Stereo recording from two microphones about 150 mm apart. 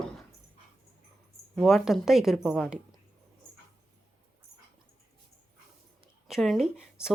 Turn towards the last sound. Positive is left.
turn(degrees=-5)  # may be behind; listen again after turning